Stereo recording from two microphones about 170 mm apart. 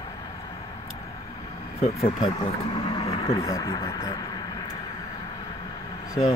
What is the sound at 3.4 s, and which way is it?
Speech, 20° left (ahead or behind).